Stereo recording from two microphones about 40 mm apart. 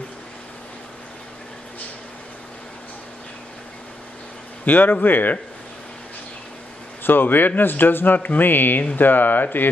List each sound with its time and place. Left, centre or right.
4.6 s speech: left
7.0 s speech: left